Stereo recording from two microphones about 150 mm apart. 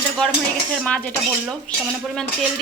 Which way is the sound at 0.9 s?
10° left (ahead or behind).